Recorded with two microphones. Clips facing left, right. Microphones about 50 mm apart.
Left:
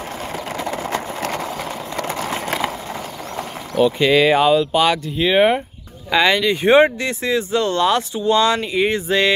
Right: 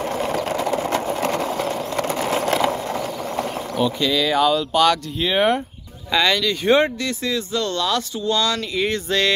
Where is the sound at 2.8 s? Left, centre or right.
Centre.